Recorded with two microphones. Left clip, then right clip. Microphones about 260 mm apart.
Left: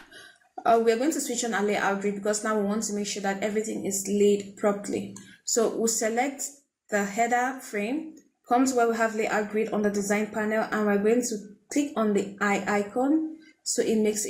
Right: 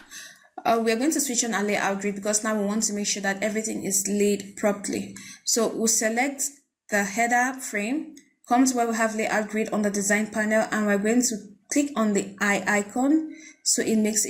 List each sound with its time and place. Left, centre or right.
0.6 s a woman's voice: right